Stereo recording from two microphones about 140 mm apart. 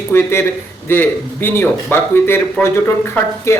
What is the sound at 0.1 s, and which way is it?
Speech, 20° left (ahead or behind).